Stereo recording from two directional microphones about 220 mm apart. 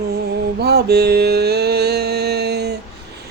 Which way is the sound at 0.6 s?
45° right (ahead or behind).